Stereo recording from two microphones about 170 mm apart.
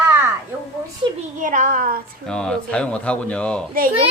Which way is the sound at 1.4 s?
50° right (ahead or behind).